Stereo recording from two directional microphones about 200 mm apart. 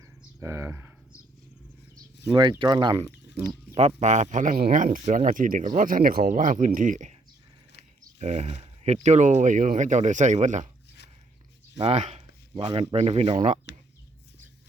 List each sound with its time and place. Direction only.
0.2 s bird: 15° right (ahead or behind)
2.3 s speech: 25° right (ahead or behind)
3.8 s speech: 35° right (ahead or behind)
8.2 s speech: 35° right (ahead or behind)
11.8 s speech: 30° right (ahead or behind)